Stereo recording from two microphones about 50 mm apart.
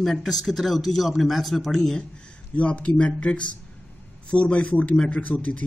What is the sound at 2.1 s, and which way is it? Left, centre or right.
A man's voice, left.